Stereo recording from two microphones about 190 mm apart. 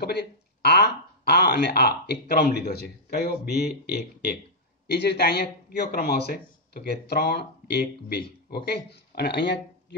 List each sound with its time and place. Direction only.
0.0 s speech: 60° left (ahead or behind)